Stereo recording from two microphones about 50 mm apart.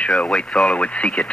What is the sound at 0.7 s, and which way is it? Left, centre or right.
Speech, left.